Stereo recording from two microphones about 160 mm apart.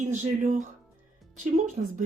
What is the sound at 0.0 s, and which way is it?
A woman's voice, 50° right (ahead or behind).